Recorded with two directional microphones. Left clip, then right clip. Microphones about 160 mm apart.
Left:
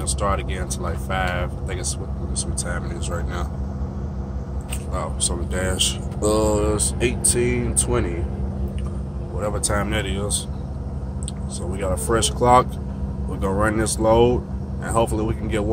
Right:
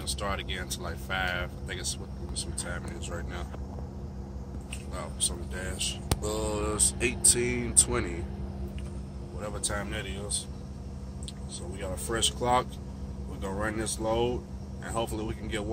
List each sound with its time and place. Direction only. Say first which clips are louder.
0.2 s speech: left 11 dB; 10° left (ahead or behind)
5.5 s speech: left 12 dB; 40° left (ahead or behind)
6.5 s speech: left 9 dB; 20° left (ahead or behind)
9.4 s speech: left 11 dB; 20° left (ahead or behind)
11.8 s speech: left 9 dB; 20° left (ahead or behind)